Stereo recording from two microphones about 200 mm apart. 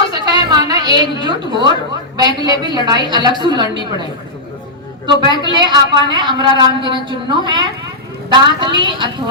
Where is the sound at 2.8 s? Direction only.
20° right (ahead or behind).